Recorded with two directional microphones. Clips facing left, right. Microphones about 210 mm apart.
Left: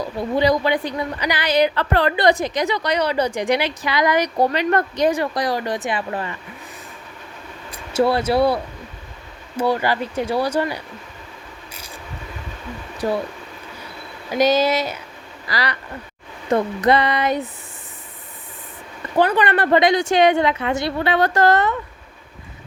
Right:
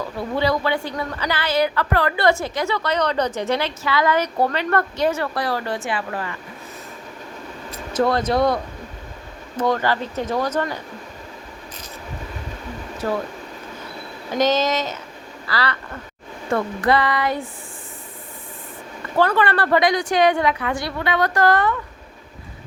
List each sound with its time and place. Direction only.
0.0 s a woman's voice: 15° left (ahead or behind)
7.7 s a woman's voice: 10° left (ahead or behind)
13.0 s speech: 10° left (ahead or behind)
14.3 s a woman's voice: 10° left (ahead or behind)
19.2 s a woman's voice: 15° left (ahead or behind)